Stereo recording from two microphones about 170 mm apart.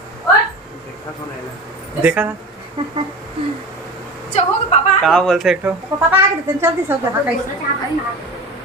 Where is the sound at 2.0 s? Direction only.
10° right (ahead or behind).